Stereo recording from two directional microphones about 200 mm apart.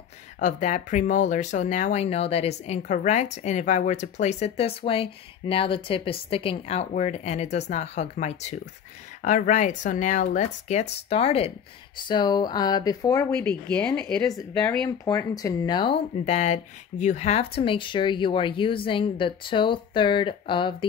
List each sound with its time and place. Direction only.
0.4 s speech: 40° left (ahead or behind)